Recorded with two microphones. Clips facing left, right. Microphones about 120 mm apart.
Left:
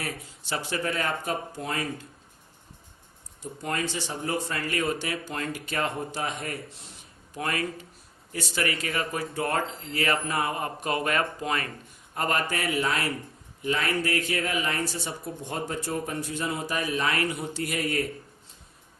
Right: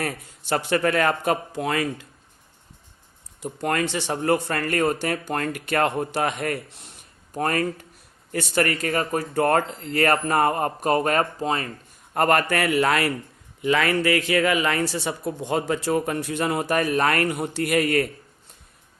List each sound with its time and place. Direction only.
0.0 s speech: 60° right (ahead or behind); by 2.0 s 85° right
3.4 s speech: 70° right (ahead or behind)
7.3 s speech: 45° right (ahead or behind)
8.3 s speech: 55° right (ahead or behind); by 11.7 s 30° right (ahead or behind)
12.1 s speech: 60° right (ahead or behind)
13.6 s speech: 90° right; by 18.0 s 70° right (ahead or behind)